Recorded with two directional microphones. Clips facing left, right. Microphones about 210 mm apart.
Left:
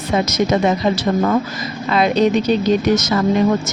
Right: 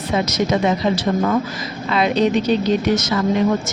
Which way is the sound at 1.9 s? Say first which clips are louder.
Left 2 dB; 45° left (ahead or behind).